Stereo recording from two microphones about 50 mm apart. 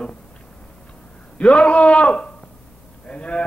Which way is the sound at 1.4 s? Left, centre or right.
Left.